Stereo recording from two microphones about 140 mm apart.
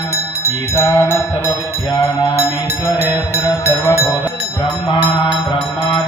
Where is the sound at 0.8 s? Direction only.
20° left (ahead or behind).